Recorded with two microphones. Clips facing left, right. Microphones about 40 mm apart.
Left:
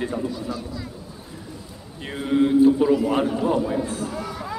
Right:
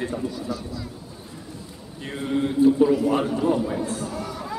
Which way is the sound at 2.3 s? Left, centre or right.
Centre.